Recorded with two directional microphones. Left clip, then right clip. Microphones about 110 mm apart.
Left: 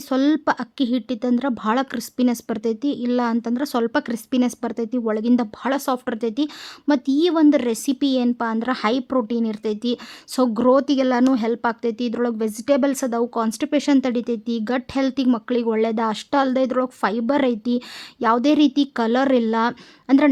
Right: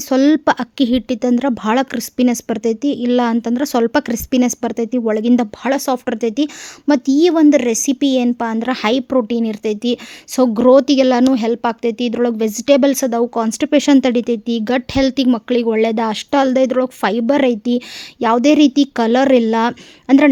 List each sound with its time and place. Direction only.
0.1 s a woman's voice: 45° right (ahead or behind)